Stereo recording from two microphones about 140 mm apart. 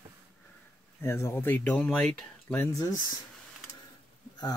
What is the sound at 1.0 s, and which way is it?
Speech, 20° left (ahead or behind).